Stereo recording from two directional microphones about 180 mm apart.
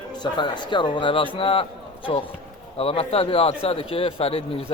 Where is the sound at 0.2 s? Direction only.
25° left (ahead or behind).